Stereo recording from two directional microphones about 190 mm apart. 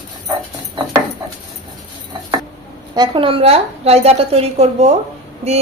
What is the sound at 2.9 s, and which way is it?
A woman's voice, 25° right (ahead or behind).